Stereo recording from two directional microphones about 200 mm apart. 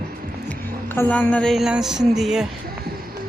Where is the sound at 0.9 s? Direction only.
10° left (ahead or behind).